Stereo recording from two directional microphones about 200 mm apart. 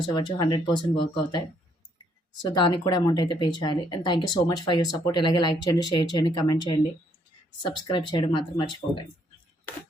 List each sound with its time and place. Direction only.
0.1 s speech: 20° left (ahead or behind)
2.4 s speech: 20° left (ahead or behind)